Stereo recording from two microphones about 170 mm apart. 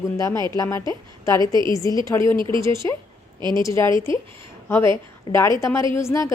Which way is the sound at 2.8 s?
20° left (ahead or behind).